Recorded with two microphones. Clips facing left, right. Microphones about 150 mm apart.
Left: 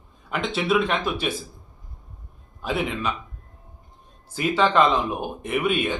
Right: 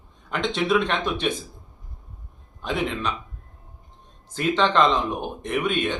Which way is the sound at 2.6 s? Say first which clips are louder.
Even; 5° left (ahead or behind).